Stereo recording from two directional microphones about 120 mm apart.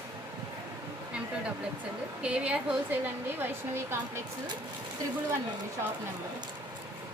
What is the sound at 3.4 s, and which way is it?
Speech, 20° right (ahead or behind).